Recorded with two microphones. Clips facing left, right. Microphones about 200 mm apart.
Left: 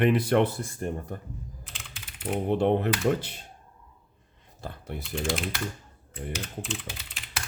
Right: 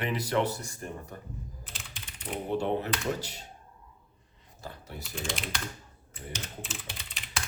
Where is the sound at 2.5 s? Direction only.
60° left (ahead or behind).